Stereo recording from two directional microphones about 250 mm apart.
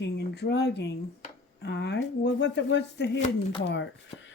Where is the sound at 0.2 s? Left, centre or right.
Left.